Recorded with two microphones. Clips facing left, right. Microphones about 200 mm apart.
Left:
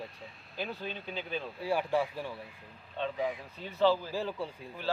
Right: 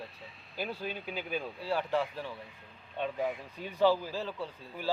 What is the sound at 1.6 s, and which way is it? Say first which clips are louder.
Speech: left 2 dB; 10° left (ahead or behind).